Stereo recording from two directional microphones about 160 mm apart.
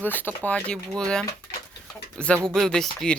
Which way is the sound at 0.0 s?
10° left (ahead or behind).